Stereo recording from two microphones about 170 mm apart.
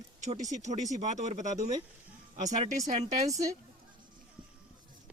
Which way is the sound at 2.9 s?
45° right (ahead or behind).